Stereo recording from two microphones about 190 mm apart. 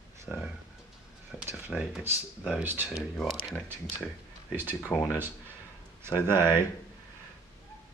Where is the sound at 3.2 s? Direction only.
Centre (ahead or behind).